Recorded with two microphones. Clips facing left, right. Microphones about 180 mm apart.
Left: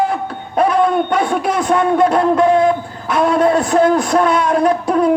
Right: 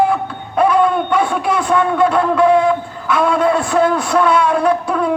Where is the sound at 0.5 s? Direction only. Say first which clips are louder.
Even; 40° left (ahead or behind).